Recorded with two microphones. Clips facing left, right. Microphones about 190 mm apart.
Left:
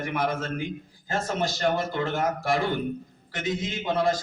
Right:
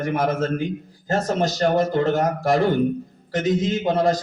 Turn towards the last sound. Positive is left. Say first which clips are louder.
# right 5 dB
turn(degrees=-40)  # may be behind; listen again after turning